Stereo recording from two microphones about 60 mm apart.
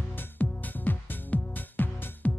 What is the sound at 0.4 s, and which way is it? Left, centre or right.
Music, left.